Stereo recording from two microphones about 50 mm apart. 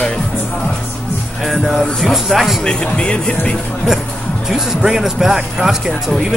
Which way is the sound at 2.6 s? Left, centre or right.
Centre.